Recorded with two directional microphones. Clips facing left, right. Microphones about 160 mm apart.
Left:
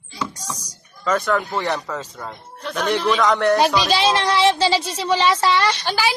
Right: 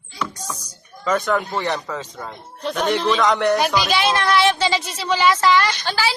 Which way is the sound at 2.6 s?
20° right (ahead or behind).